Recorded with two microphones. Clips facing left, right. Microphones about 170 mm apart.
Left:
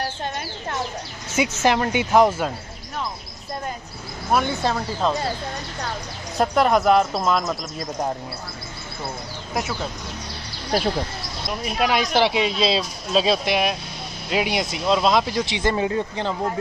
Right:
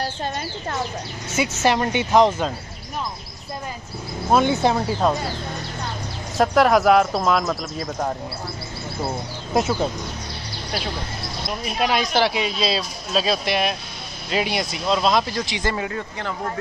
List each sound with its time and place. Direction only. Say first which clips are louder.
1.3 s speech: even; 15° left (ahead or behind)
4.3 s speech: right 4 dB; 20° right (ahead or behind)
6.3 s speech: right 2 dB; centre (ahead or behind)
9.5 s speech: right 6 dB; 25° right (ahead or behind)
10.7 s speech: left 7 dB; 40° left (ahead or behind)
11.4 s speech: left 1 dB; 5° left (ahead or behind)
12.0 s speech: left 1 dB; 15° left (ahead or behind)